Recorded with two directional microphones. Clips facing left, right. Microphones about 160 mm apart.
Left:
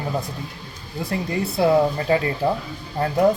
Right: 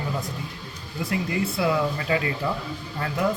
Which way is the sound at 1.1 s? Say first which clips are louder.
Left 2 dB; 30° left (ahead or behind).